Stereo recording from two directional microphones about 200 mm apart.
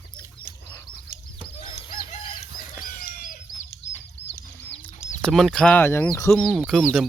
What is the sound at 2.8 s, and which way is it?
Chicken, 45° left (ahead or behind).